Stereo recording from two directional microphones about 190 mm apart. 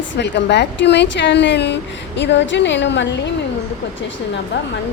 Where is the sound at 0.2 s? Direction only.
65° left (ahead or behind).